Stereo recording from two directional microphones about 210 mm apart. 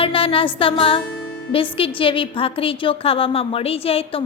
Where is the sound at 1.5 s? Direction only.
25° left (ahead or behind).